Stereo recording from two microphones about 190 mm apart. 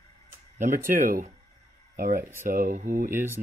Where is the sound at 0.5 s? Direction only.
40° right (ahead or behind).